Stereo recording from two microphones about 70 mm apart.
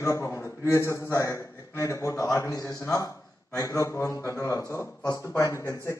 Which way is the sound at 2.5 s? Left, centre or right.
Left.